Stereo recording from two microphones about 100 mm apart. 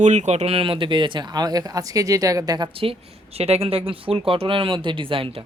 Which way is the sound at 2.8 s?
80° right.